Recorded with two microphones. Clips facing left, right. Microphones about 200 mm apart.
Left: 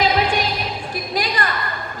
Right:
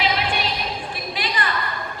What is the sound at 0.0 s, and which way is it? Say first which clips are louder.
Music: left 5 dB; 40° left (ahead or behind).